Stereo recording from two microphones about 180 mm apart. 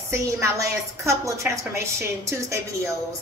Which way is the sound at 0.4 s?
15° right (ahead or behind).